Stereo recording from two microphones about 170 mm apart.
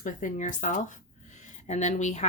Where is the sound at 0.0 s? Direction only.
50° left (ahead or behind).